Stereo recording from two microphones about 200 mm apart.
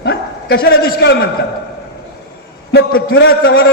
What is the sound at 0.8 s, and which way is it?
Speech, 50° left (ahead or behind).